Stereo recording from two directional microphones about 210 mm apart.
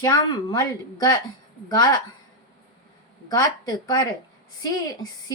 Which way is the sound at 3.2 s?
20° left (ahead or behind).